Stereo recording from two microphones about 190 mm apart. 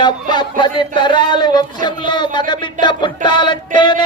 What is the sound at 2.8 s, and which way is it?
Music, 25° left (ahead or behind).